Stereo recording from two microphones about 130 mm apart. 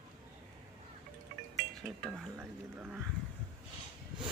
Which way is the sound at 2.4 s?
10° right (ahead or behind).